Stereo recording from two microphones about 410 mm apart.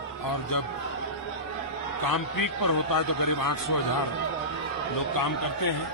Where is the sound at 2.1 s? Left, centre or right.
Left.